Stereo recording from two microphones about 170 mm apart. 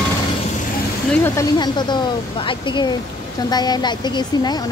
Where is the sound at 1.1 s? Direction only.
15° left (ahead or behind).